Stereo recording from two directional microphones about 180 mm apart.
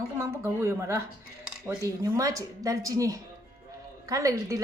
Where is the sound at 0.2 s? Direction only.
15° right (ahead or behind).